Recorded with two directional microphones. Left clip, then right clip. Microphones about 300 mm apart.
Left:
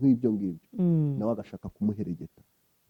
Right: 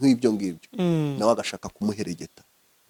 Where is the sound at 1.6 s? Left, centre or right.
Centre.